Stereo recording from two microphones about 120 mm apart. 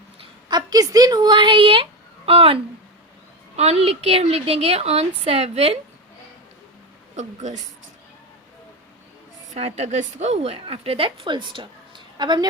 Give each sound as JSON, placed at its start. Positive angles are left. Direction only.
{"t": 0.4, "sound": "a woman's voice", "side_deg": -35}
{"t": 7.2, "sound": "speech", "side_deg": -75}
{"t": 9.6, "sound": "a woman's voice", "side_deg": -60}